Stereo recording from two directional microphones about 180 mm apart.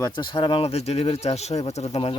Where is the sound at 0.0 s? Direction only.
25° left (ahead or behind).